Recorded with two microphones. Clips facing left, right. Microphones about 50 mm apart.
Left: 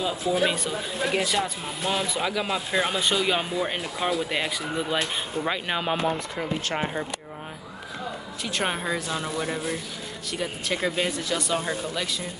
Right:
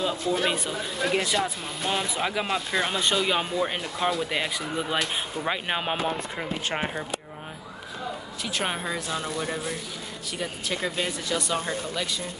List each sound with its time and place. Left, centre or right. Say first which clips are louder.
0.0 s speech: left 1 dB; centre
8.5 s speech: left 2 dB; centre